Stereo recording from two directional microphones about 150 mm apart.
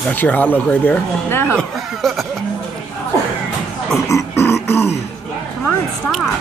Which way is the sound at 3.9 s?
20° left (ahead or behind).